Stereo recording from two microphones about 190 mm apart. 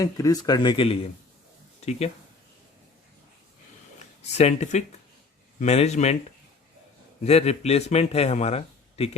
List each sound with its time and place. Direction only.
0.0 s speech: 20° left (ahead or behind); by 2.0 s 35° left (ahead or behind)
4.4 s a man's voice: 35° left (ahead or behind)
7.3 s a man's voice: 35° left (ahead or behind)